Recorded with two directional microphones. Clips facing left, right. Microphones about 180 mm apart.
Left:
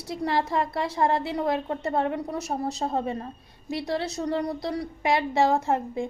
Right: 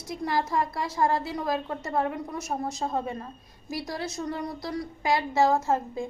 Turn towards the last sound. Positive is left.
turn(degrees=20)  # may be behind; listen again after turning